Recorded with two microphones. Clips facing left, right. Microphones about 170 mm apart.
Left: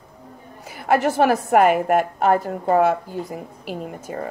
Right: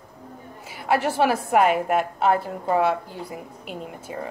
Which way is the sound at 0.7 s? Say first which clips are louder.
Left 4 dB; 50° left (ahead or behind).